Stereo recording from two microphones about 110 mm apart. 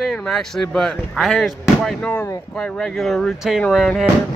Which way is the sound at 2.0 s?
30° left (ahead or behind).